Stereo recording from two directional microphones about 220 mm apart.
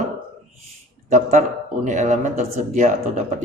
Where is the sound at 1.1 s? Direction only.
35° right (ahead or behind).